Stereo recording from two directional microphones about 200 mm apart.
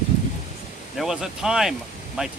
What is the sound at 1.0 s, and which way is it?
A man's voice, centre (ahead or behind).